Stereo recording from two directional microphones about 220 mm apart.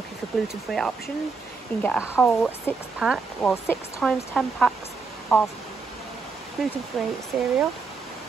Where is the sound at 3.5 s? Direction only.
10° left (ahead or behind).